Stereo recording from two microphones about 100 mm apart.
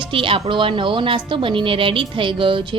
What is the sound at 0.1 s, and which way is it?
Speech, 60° right (ahead or behind).